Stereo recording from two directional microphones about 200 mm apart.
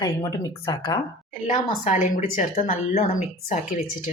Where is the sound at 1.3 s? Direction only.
35° left (ahead or behind).